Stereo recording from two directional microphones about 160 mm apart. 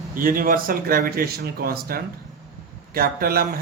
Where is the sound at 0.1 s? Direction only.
60° right (ahead or behind).